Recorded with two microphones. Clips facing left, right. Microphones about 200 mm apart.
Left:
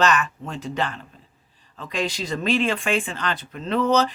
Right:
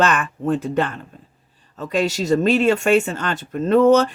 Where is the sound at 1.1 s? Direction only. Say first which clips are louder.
Right 6 dB; 50° right (ahead or behind).